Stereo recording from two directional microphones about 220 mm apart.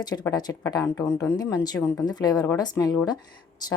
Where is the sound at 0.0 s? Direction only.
20° left (ahead or behind).